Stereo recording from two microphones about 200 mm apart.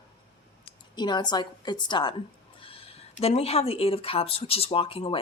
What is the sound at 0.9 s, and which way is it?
Speech, 20° left (ahead or behind).